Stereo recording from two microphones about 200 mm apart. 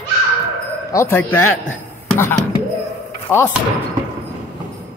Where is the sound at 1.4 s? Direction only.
90° left.